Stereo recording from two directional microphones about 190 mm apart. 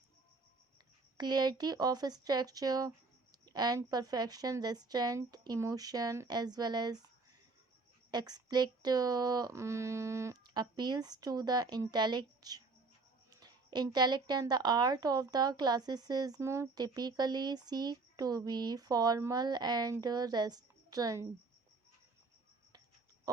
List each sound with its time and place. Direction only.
1.2 s a woman's voice: 20° right (ahead or behind)
8.1 s a woman's voice: 20° right (ahead or behind)